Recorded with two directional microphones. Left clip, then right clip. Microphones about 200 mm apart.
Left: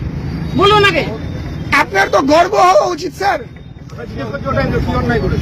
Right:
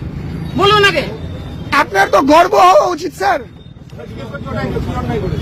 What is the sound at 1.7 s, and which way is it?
Speech, 20° right (ahead or behind).